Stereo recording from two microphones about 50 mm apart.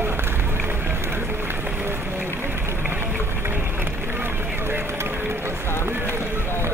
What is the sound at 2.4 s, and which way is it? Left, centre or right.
Run, right.